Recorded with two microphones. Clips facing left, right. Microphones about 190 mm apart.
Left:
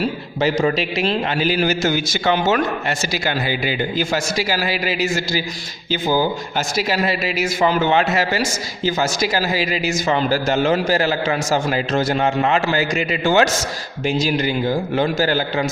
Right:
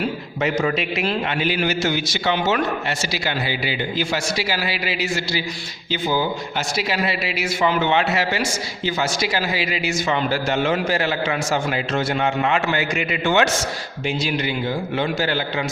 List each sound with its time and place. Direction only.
0.0 s a man's voice: 35° left (ahead or behind)